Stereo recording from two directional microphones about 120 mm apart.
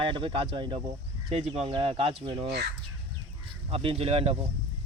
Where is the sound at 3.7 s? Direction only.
50° right (ahead or behind).